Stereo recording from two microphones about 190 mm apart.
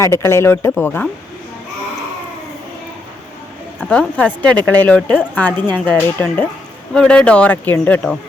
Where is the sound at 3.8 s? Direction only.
5° left (ahead or behind).